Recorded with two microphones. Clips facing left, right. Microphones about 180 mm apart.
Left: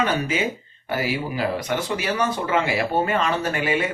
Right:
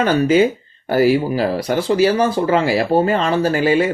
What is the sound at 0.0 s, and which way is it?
Speech, 35° right (ahead or behind).